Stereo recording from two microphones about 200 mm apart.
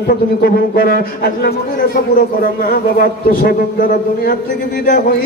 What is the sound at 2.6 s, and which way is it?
Speech, 50° left (ahead or behind).